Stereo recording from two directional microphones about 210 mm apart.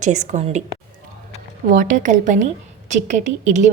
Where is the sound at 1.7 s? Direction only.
35° right (ahead or behind).